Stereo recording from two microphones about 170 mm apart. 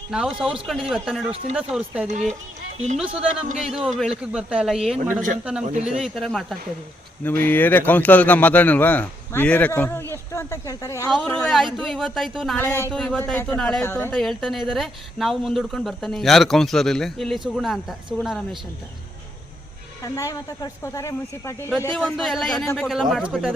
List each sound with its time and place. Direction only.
0.1 s speech: 5° right (ahead or behind)
2.0 s speech: 45° right (ahead or behind)
3.6 s speech: centre (ahead or behind); by 11.1 s 20° left (ahead or behind)
11.1 s speech: centre (ahead or behind)
12.5 s speech: 15° left (ahead or behind)
20.0 s a woman's voice: 20° left (ahead or behind)
21.8 s speech: 5° left (ahead or behind)
22.9 s speech: centre (ahead or behind)